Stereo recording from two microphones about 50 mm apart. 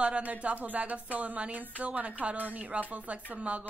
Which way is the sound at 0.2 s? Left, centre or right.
Right.